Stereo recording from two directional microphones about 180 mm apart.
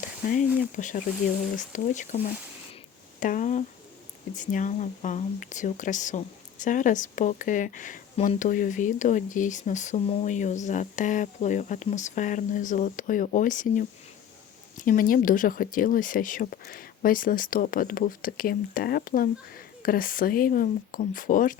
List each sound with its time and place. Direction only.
0.4 s speech: 10° right (ahead or behind)
0.8 s speech: 45° left (ahead or behind)